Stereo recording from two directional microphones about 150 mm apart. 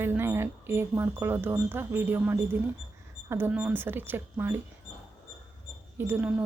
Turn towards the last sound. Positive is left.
turn(degrees=-15)  # may be behind; listen again after turning